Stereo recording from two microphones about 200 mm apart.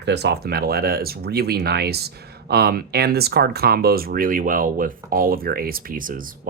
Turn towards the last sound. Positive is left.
turn(degrees=-45)  # may be behind; listen again after turning